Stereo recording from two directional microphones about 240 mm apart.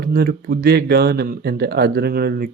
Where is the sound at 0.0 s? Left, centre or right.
Right.